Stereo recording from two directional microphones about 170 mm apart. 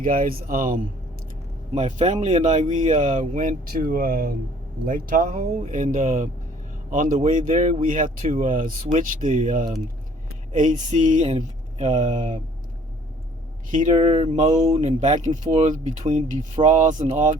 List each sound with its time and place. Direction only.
0.0 s speech: 50° right (ahead or behind)
1.7 s speech: 40° right (ahead or behind)
13.7 s speech: 45° right (ahead or behind)